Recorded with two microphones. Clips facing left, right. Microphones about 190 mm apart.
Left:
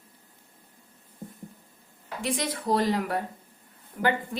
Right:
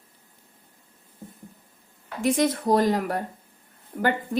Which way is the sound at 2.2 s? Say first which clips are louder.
Right 7 dB; 50° right (ahead or behind).